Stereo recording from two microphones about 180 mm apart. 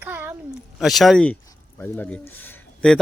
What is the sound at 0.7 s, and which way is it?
A man's voice, centre (ahead or behind).